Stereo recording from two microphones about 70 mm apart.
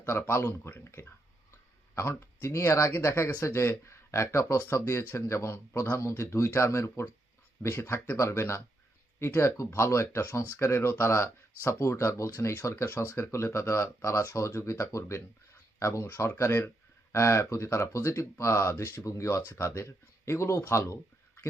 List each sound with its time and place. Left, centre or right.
0.2 s speech: left
7.6 s speech: left
8.1 s speech: left
16.6 s a sound: left
17.2 s speech: left